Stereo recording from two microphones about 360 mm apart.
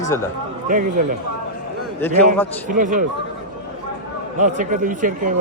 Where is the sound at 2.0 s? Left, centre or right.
Centre.